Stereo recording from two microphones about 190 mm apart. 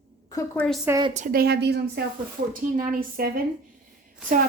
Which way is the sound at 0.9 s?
20° right (ahead or behind).